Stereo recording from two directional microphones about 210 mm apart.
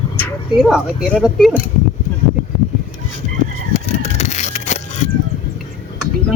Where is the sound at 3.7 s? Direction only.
30° left (ahead or behind).